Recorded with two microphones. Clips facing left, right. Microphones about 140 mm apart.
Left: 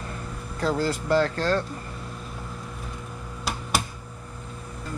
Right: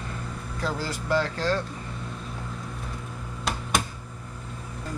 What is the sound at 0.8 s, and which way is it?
Speech, 35° left (ahead or behind).